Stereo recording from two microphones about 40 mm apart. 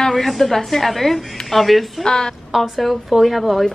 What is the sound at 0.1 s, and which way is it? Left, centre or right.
A woman's voice, centre.